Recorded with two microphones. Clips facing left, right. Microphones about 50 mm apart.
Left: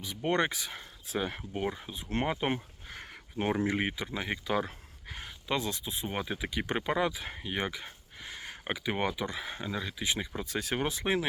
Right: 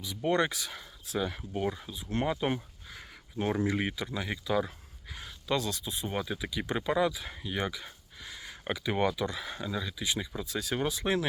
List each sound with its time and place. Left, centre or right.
0.0 s speech: left
2.9 s a sound: left
3.4 s speech: left
5.5 s speech: left
8.6 s speech: left